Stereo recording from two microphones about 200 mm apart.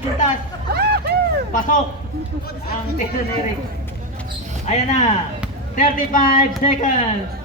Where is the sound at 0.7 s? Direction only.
55° right (ahead or behind).